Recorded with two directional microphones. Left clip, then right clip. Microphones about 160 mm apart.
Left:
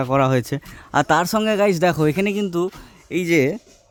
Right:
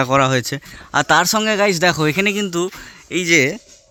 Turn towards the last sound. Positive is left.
turn(degrees=10)  # may be behind; listen again after turning